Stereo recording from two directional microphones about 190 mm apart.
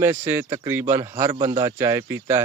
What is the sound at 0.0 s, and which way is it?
Speech, 10° right (ahead or behind).